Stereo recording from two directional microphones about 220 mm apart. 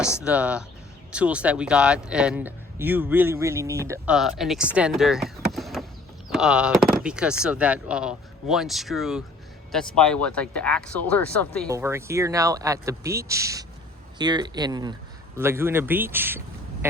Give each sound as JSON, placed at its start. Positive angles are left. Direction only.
{"t": 0.3, "sound": "speech", "side_deg": -5}
{"t": 11.7, "sound": "speech", "side_deg": -10}